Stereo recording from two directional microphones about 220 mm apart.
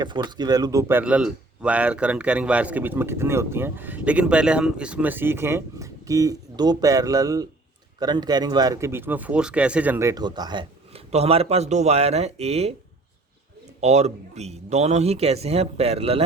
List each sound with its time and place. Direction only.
0.0 s speech: 20° right (ahead or behind)
13.8 s speech: 30° right (ahead or behind)